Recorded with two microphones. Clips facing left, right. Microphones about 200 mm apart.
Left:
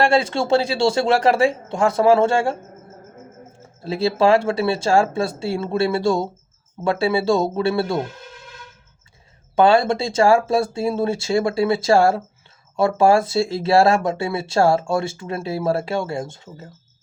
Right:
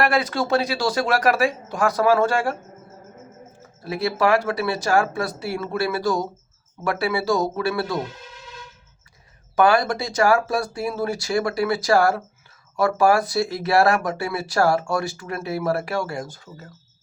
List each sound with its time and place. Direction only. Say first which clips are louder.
0.0 s speech: left 3 dB; 25° left (ahead or behind)
3.6 s speech: left 4 dB; 25° left (ahead or behind)
9.6 s speech: left 3 dB; 25° left (ahead or behind)